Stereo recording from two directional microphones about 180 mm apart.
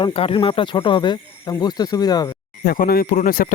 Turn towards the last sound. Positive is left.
turn(degrees=50)  # may be behind; listen again after turning